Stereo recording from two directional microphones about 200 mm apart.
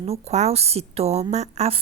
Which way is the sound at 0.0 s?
30° right (ahead or behind).